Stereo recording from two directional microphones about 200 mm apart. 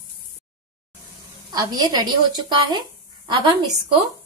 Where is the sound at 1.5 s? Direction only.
20° right (ahead or behind).